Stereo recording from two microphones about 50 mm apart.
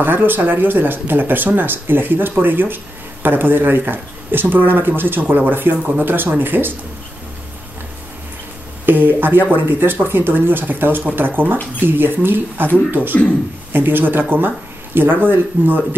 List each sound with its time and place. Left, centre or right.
0.0 s speech: right
8.8 s speech: right